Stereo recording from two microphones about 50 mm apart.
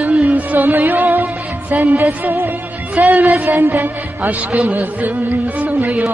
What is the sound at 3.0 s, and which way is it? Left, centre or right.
Music of bollywood, right.